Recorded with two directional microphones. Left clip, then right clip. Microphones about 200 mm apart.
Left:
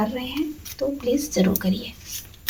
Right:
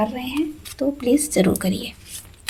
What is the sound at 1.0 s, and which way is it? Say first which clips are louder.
Speech: right 5 dB; 45° right (ahead or behind).